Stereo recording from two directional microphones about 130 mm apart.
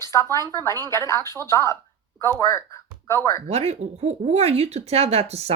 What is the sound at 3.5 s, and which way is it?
Speech, 55° right (ahead or behind).